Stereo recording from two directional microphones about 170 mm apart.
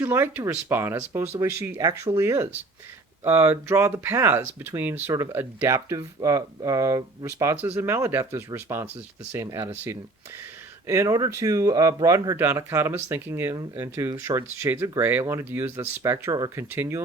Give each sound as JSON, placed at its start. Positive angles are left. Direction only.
{"t": 0.1, "sound": "speech", "side_deg": -15}